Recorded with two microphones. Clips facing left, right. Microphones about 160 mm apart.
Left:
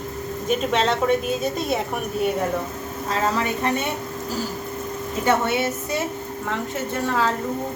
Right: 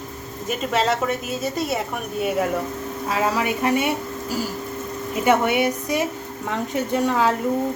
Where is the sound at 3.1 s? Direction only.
10° right (ahead or behind).